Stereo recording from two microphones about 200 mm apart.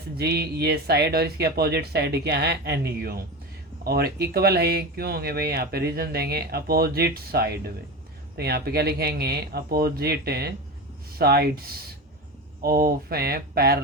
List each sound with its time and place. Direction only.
0.2 s speech: 50° right (ahead or behind)